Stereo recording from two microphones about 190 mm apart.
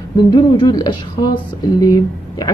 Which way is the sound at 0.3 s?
20° left (ahead or behind).